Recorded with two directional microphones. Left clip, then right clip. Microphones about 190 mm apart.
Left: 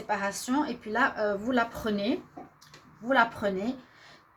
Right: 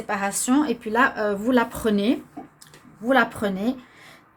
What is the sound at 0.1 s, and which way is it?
Speech, 50° right (ahead or behind).